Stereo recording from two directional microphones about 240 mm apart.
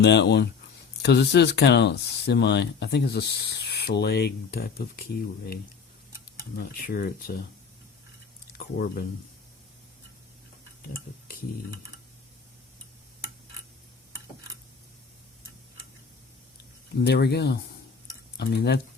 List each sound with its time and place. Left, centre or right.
0.0 s speech: left
6.6 s speech: left
8.5 s speech: left
17.0 s speech: left